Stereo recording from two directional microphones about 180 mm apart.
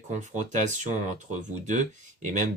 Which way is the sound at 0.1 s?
40° right (ahead or behind).